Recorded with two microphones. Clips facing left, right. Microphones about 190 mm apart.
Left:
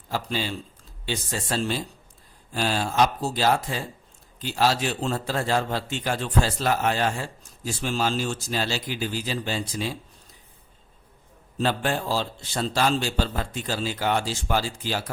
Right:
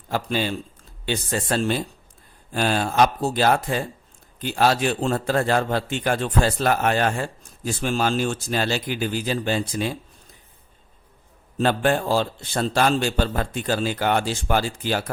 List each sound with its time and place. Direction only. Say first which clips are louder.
0.1 s a man's voice: right 4 dB; 55° right (ahead or behind)
11.5 s a man's voice: right 5 dB; 55° right (ahead or behind)